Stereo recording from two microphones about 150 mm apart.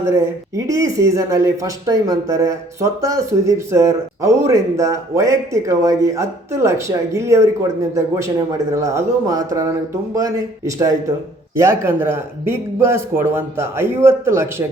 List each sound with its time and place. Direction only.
0.0 s a man's voice: 20° right (ahead or behind)